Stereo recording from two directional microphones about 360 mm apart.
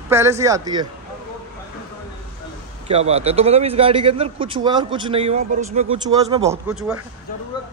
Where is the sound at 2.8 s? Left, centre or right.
Centre.